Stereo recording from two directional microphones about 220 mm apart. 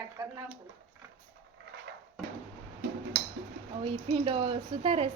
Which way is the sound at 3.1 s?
50° right (ahead or behind).